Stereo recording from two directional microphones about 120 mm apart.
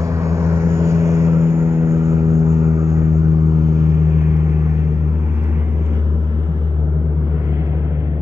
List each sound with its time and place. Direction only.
0.0 s vehicle: 25° right (ahead or behind)